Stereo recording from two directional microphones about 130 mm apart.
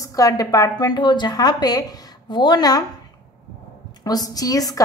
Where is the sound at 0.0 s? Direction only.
25° left (ahead or behind).